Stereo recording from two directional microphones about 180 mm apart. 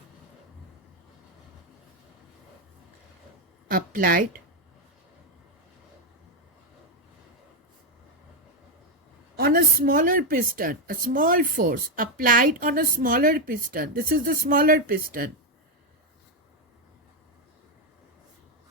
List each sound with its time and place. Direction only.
3.7 s a woman's voice: 55° right (ahead or behind)
9.3 s a woman's voice: 55° right (ahead or behind)